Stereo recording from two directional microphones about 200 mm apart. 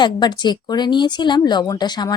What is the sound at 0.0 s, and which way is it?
Speech, 20° left (ahead or behind).